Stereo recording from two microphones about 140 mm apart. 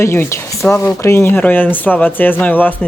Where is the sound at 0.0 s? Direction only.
20° left (ahead or behind).